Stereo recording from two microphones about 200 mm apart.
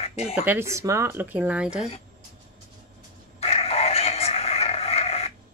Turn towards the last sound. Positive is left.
turn(degrees=30)  # may be behind; listen again after turning